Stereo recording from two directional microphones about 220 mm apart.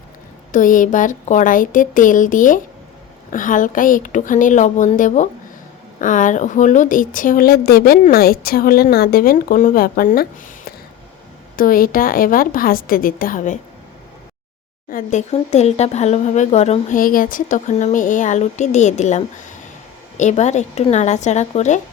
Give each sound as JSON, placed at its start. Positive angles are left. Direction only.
{"t": 0.5, "sound": "speech", "side_deg": 35}
{"t": 11.5, "sound": "speech", "side_deg": 40}
{"t": 14.8, "sound": "speech", "side_deg": 35}